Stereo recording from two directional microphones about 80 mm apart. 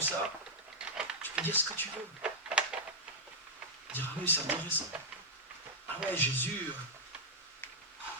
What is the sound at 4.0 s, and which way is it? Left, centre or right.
Speech, left.